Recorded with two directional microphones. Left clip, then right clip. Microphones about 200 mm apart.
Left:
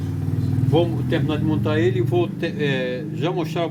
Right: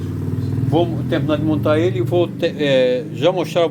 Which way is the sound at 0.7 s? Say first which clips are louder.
Right 2 dB; 35° right (ahead or behind).